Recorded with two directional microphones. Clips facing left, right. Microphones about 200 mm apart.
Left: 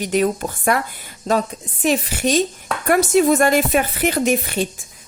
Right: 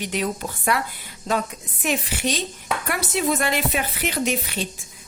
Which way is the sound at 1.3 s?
35° left (ahead or behind).